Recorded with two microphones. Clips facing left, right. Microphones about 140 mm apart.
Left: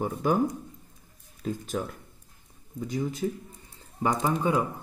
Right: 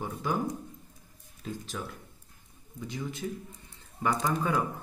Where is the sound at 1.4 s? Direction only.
50° left (ahead or behind).